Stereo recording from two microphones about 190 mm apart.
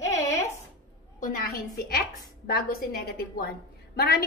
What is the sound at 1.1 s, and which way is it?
A woman's voice, 45° left (ahead or behind).